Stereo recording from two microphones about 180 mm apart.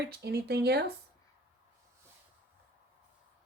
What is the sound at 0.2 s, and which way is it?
Speech, 65° right (ahead or behind).